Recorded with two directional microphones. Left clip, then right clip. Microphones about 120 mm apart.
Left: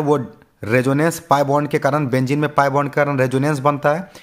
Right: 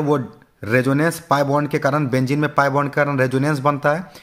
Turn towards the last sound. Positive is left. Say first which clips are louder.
# left 1 dB
turn(degrees=30)  # may be behind; listen again after turning